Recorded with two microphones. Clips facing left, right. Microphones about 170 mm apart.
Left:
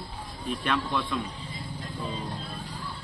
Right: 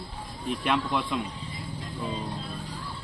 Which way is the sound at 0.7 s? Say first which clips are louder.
Right 2 dB; 20° right (ahead or behind).